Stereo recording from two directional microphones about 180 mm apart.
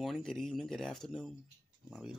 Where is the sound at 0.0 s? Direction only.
Centre (ahead or behind).